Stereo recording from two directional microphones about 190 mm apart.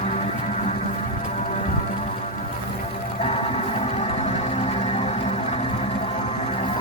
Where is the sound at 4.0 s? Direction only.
30° left (ahead or behind).